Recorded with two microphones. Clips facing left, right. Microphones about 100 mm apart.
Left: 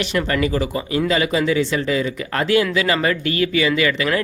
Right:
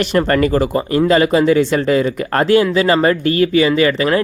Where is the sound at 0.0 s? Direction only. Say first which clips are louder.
Right 6 dB; 45° right (ahead or behind).